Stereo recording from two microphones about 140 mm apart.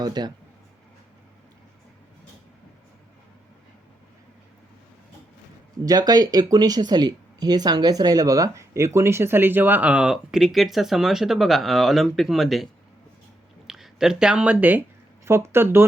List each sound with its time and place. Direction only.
0.0 s speech: 30° right (ahead or behind)
5.8 s speech: 25° right (ahead or behind); by 12.6 s centre (ahead or behind)
13.7 s speech: centre (ahead or behind)